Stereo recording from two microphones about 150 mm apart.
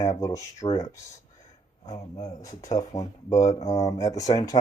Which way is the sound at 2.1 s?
25° left (ahead or behind).